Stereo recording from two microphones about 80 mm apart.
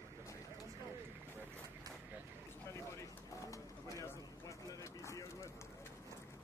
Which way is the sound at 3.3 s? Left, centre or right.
Left.